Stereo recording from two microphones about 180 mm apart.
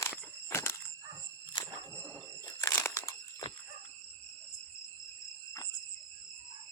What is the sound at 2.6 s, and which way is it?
Crunch, 15° left (ahead or behind).